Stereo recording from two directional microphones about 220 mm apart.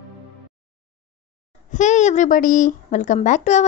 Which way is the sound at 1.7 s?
35° left (ahead or behind).